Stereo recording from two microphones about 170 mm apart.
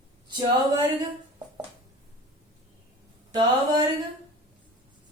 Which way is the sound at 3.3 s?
25° right (ahead or behind).